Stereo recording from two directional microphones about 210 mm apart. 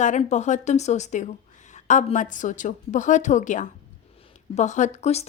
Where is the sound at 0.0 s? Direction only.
35° left (ahead or behind).